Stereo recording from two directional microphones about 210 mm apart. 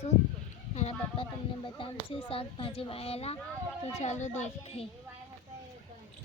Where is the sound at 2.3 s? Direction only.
25° left (ahead or behind).